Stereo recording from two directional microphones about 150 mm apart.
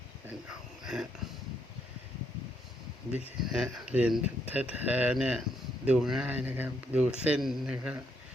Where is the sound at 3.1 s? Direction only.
5° right (ahead or behind).